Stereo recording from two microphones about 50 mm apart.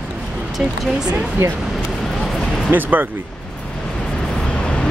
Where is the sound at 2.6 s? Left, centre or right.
Right.